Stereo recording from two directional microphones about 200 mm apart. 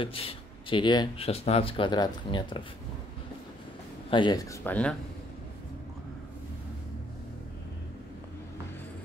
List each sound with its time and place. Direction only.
0.0 s speech: 30° left (ahead or behind)
4.1 s speech: 20° left (ahead or behind)